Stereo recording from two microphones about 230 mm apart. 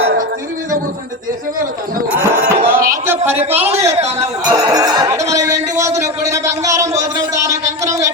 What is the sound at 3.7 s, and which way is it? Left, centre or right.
Speech, right.